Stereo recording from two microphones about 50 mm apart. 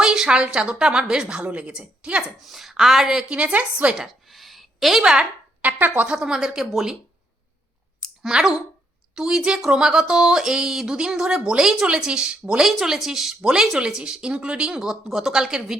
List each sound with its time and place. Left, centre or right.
0.0 s a woman's voice: centre
2.2 s a woman's voice: centre; by 3.9 s right
3.9 s speech: centre
5.6 s speech: right
6.1 s a woman's voice: centre
8.3 s a woman's voice: centre
12.6 s a woman's voice: centre